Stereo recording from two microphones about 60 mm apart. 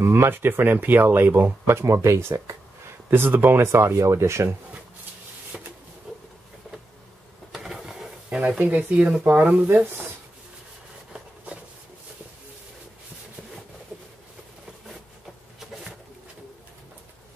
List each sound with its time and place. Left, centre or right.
0.0 s speech: right
1.7 s speech: right
3.1 s speech: right
5.5 s a sound: right
7.5 s a sound: centre
8.3 s speech: centre
9.2 s speech: right